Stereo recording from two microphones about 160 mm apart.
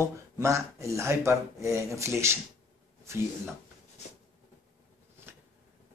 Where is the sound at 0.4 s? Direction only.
20° right (ahead or behind).